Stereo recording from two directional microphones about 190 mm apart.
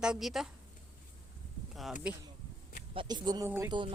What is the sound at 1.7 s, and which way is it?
Speech, centre (ahead or behind).